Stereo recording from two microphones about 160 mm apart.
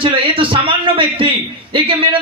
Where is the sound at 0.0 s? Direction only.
35° right (ahead or behind).